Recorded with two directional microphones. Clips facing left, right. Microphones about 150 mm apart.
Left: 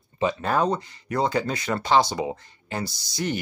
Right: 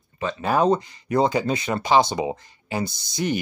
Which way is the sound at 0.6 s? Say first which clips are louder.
Right 4 dB; 20° right (ahead or behind).